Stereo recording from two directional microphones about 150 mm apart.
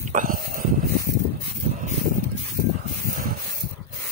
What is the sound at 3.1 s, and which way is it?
Spray, 65° right (ahead or behind).